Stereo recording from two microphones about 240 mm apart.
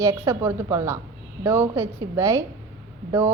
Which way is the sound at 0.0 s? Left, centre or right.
Centre.